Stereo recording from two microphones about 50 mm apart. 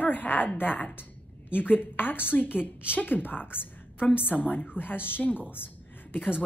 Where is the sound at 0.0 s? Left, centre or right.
Left.